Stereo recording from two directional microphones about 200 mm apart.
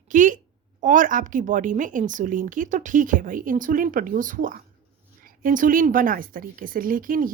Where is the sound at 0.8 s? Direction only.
40° right (ahead or behind).